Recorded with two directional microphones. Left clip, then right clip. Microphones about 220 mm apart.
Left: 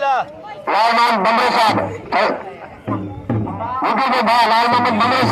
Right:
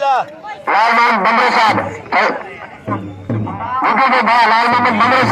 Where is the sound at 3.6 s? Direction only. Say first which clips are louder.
Right 5 dB; 20° left (ahead or behind).